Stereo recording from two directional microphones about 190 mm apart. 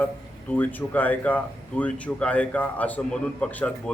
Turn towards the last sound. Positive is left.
turn(degrees=5)  # may be behind; listen again after turning